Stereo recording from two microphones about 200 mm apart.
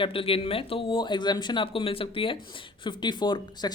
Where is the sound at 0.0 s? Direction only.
25° left (ahead or behind).